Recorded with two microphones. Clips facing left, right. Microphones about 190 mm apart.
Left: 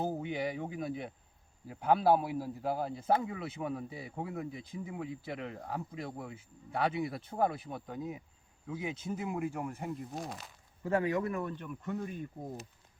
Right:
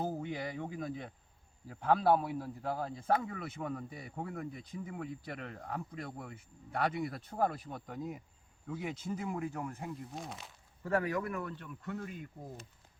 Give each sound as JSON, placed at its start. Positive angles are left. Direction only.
{"t": 0.2, "sound": "speech", "side_deg": 5}
{"t": 10.2, "sound": "speech", "side_deg": 0}
{"t": 10.8, "sound": "speech", "side_deg": 20}